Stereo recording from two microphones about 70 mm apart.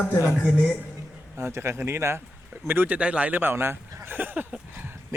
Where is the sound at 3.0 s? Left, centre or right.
Centre.